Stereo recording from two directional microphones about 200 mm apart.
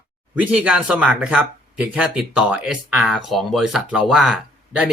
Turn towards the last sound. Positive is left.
turn(degrees=-5)  # may be behind; listen again after turning